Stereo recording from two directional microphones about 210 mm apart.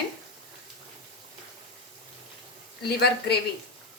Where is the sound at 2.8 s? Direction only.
50° left (ahead or behind).